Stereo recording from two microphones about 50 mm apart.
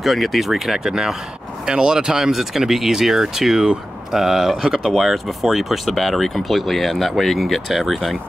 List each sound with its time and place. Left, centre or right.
0.0 s speech: centre